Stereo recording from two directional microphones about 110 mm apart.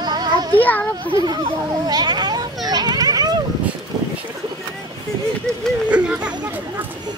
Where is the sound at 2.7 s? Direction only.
40° right (ahead or behind).